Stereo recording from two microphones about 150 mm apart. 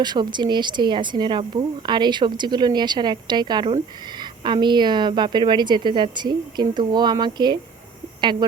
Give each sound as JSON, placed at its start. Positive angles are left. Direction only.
{"t": 0.0, "sound": "speech", "side_deg": -30}